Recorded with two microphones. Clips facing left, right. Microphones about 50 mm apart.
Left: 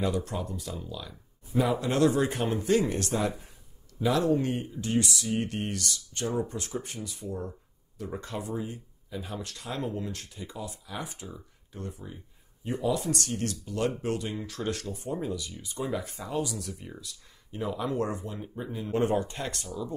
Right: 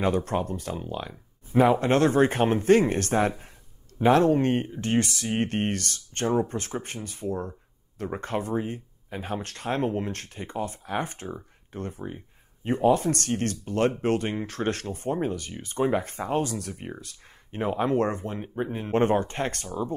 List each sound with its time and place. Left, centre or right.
0.0 s speech: right